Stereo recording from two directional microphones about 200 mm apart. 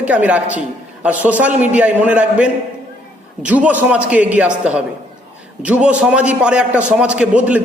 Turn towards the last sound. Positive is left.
turn(degrees=-5)  # may be behind; listen again after turning